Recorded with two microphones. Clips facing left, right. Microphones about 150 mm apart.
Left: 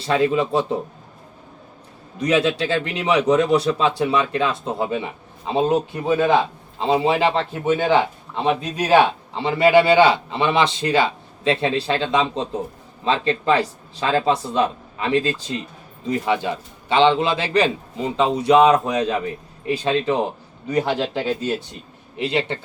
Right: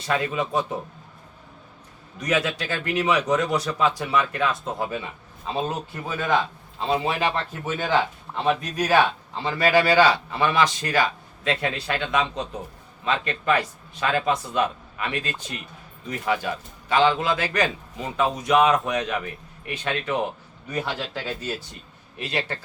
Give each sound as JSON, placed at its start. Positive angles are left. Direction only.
{"t": 0.0, "sound": "a man's voice", "side_deg": 30}
{"t": 2.1, "sound": "a man's voice", "side_deg": 30}
{"t": 22.1, "sound": "a man's voice", "side_deg": 25}